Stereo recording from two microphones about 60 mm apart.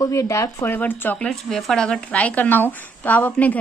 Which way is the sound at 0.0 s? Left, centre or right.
Left.